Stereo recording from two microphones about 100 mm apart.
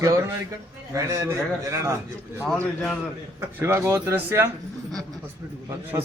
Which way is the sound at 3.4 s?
25° right (ahead or behind).